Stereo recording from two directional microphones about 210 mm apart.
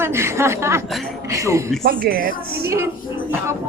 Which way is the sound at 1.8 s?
45° right (ahead or behind).